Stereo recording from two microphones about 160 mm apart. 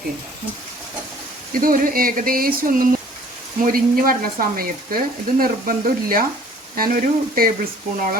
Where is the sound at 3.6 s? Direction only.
65° right (ahead or behind).